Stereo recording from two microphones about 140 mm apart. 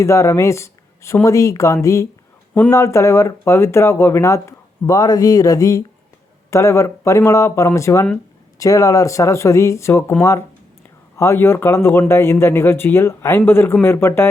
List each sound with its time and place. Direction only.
0.0 s a man's voice: 20° left (ahead or behind)